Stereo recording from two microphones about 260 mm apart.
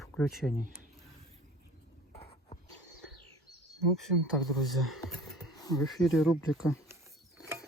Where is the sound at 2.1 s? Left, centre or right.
Left.